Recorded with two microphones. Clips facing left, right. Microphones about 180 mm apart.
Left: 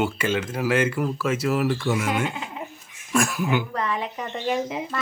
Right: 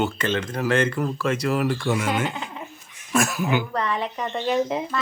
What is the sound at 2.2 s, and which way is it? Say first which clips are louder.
Speech: even; 35° right (ahead or behind).